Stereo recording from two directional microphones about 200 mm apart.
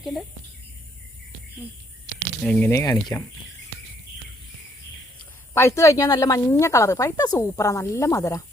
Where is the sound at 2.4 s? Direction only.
5° left (ahead or behind).